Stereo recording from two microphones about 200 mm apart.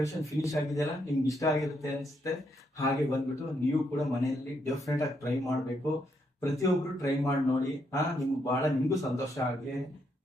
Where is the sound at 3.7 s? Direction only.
Centre (ahead or behind).